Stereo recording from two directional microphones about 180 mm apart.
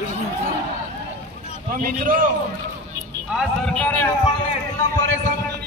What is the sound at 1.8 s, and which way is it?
Speech, 50° right (ahead or behind).